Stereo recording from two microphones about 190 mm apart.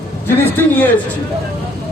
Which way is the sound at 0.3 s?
10° left (ahead or behind).